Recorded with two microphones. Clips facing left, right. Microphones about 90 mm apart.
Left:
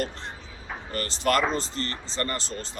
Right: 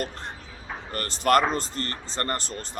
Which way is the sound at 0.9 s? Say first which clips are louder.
Right 3 dB; 45° right (ahead or behind).